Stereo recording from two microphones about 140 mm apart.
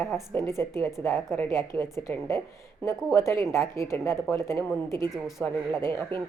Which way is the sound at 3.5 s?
20° left (ahead or behind).